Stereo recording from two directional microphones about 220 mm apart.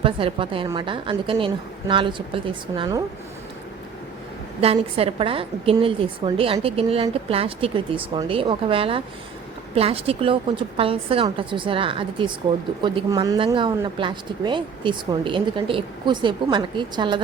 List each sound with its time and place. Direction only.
0.0 s a woman's voice: 25° right (ahead or behind)
4.6 s a woman's voice: 25° right (ahead or behind)